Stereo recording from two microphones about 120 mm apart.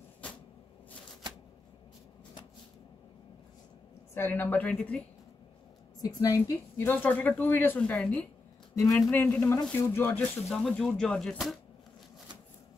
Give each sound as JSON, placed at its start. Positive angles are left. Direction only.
{"t": 4.1, "sound": "speech", "side_deg": 15}
{"t": 5.9, "sound": "a woman's voice", "side_deg": 30}
{"t": 6.9, "sound": "speech", "side_deg": 15}
{"t": 8.7, "sound": "speech", "side_deg": 20}
{"t": 10.6, "sound": "speech", "side_deg": 5}